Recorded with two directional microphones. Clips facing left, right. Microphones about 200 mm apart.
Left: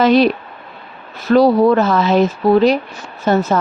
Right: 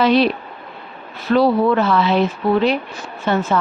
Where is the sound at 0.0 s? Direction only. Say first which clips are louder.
Left 3 dB; 45° left (ahead or behind).